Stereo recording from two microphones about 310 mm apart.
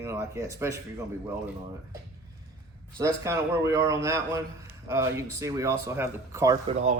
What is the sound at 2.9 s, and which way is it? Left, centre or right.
Speech, centre.